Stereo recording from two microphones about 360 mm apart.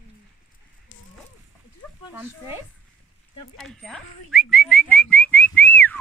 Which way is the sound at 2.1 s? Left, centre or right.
Centre.